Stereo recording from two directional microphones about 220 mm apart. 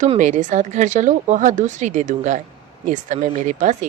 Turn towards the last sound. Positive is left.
turn(degrees=-35)  # may be behind; listen again after turning